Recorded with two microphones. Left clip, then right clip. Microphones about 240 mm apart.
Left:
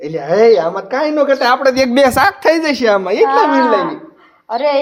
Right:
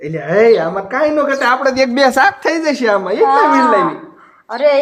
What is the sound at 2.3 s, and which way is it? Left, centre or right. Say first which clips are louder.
Speech: left 4 dB; centre.